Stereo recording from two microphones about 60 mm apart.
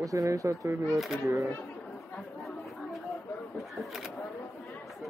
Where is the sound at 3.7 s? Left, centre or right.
Centre.